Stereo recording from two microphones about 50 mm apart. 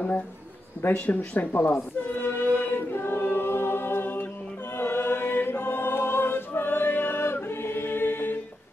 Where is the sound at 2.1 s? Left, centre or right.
Left.